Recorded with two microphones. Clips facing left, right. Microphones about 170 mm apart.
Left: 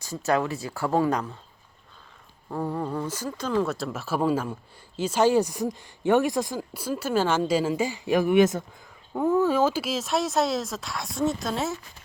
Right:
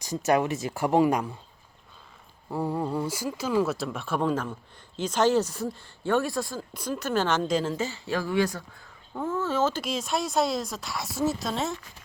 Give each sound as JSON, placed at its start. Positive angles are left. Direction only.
{"t": 0.3, "sound": "speech", "side_deg": -20}
{"t": 2.5, "sound": "speech", "side_deg": -10}